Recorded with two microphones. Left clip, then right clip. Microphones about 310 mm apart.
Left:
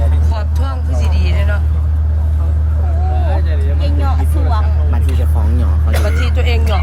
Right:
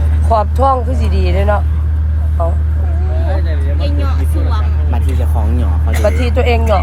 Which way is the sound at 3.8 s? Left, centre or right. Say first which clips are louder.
Left 1 dB; centre.